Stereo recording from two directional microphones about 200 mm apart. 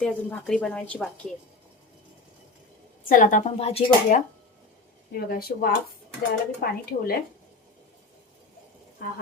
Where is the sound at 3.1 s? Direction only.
40° left (ahead or behind).